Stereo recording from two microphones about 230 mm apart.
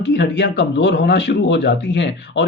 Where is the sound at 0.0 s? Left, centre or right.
Left.